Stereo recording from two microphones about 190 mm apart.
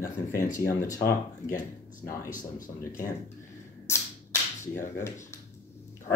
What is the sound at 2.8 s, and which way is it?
Speech, 15° left (ahead or behind).